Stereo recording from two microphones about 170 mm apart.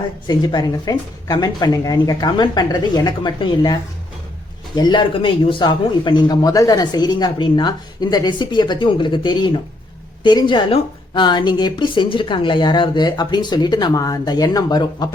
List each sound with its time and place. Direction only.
0.3 s speech: 25° left (ahead or behind)